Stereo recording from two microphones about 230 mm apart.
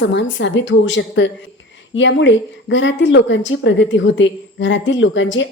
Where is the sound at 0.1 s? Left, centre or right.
Left.